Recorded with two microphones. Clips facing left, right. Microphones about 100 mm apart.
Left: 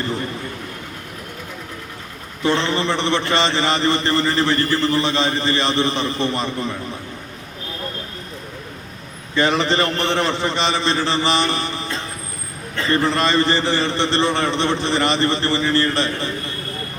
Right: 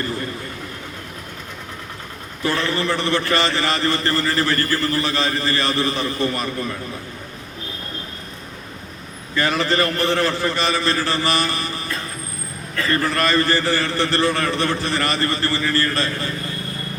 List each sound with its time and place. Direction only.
2.4 s a man's voice: 20° left (ahead or behind)
9.3 s a man's voice: 20° left (ahead or behind)